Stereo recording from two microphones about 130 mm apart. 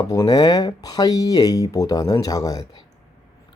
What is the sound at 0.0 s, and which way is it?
Speech, 25° left (ahead or behind).